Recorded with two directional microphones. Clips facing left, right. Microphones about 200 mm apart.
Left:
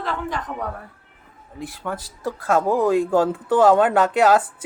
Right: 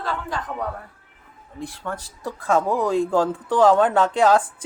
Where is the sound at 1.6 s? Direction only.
5° left (ahead or behind).